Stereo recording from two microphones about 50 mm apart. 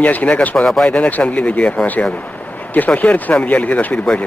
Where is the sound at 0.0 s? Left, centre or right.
Left.